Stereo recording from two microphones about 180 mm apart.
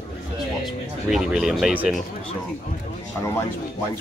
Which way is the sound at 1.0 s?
Centre (ahead or behind).